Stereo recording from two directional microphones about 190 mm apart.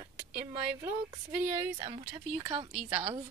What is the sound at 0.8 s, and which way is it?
A woman's voice, 20° right (ahead or behind).